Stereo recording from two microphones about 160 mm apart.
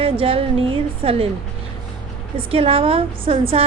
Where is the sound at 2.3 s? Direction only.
35° right (ahead or behind).